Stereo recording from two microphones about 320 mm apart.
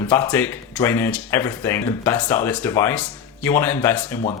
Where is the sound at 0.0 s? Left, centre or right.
Centre.